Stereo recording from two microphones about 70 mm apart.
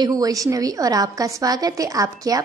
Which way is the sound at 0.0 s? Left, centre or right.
Right.